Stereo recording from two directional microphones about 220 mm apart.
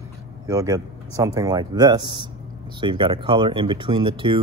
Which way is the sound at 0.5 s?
15° right (ahead or behind).